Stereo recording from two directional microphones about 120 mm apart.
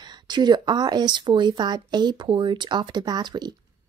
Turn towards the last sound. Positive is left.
turn(degrees=-35)  # may be behind; listen again after turning